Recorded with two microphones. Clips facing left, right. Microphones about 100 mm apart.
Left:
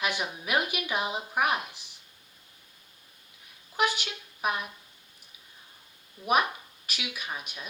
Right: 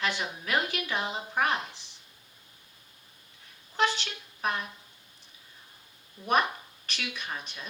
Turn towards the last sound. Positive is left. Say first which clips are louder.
# even
turn(degrees=10)  # may be behind; listen again after turning